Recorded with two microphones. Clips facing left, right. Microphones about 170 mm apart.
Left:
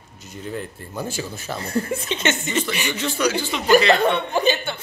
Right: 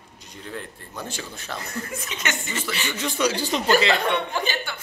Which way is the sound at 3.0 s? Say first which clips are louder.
Right 1 dB; 15° right (ahead or behind).